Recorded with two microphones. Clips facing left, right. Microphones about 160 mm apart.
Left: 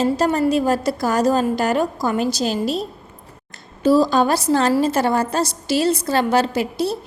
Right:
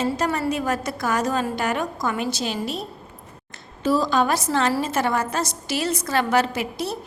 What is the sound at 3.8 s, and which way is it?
A woman's voice, 35° left (ahead or behind).